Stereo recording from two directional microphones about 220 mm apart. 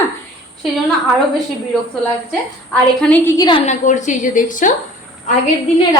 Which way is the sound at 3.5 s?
30° left (ahead or behind).